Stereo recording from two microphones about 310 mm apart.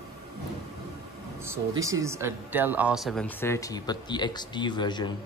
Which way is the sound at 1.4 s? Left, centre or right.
Centre.